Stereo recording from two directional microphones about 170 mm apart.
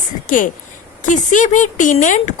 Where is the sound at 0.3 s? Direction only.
50° left (ahead or behind).